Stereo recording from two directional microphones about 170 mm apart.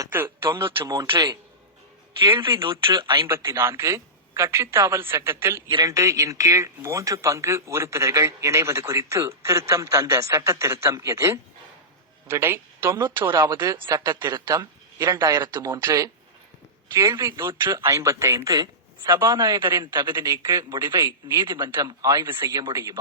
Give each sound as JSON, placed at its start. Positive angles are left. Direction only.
{"t": 0.0, "sound": "speech", "side_deg": -15}
{"t": 0.9, "sound": "speech", "side_deg": -25}
{"t": 3.2, "sound": "speech", "side_deg": -15}
{"t": 13.3, "sound": "speech", "side_deg": -25}
{"t": 15.7, "sound": "speech", "side_deg": -15}
{"t": 20.5, "sound": "speech", "side_deg": -15}
{"t": 21.2, "sound": "speech", "side_deg": -30}